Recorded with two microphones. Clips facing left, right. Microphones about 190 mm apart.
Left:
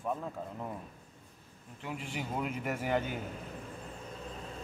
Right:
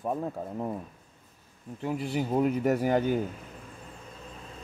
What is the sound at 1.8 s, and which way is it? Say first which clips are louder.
Speech: right 9 dB; 40° right (ahead or behind).